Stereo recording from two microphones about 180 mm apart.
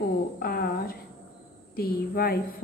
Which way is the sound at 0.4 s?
55° left (ahead or behind).